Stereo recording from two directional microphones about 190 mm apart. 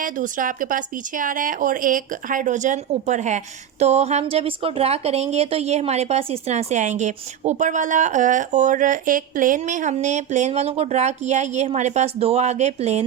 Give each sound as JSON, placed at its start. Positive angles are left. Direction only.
{"t": 0.0, "sound": "speech", "side_deg": -45}